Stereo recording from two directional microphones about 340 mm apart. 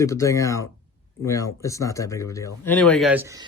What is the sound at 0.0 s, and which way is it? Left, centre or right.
Speech, centre.